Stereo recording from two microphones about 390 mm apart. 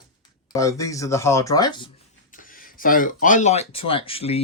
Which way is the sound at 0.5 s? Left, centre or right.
Centre.